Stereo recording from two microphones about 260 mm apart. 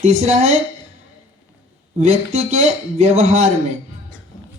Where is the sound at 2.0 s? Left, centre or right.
Right.